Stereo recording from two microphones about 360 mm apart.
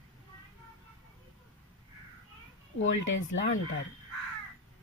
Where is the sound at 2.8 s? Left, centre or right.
Left.